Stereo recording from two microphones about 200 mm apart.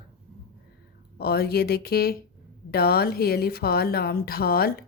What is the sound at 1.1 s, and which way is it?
A woman's voice, 50° left (ahead or behind).